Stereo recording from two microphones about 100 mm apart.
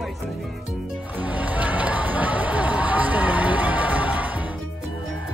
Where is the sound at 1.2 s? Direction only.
15° right (ahead or behind).